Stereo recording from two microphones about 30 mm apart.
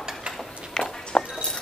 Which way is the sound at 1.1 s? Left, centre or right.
Left.